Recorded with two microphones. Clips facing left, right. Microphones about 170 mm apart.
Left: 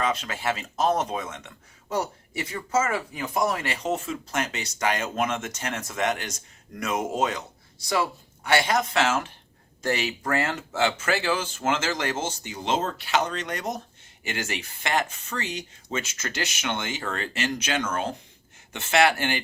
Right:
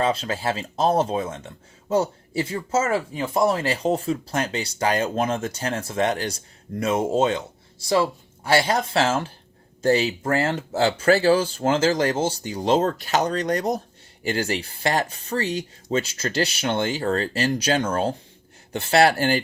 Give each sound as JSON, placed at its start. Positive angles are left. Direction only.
{"t": 0.0, "sound": "speech", "side_deg": -30}